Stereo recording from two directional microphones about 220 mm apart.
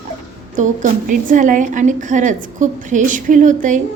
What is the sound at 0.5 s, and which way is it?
A woman's voice, 35° right (ahead or behind).